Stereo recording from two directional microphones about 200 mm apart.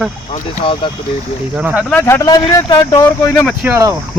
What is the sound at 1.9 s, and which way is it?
Speech, 10° left (ahead or behind).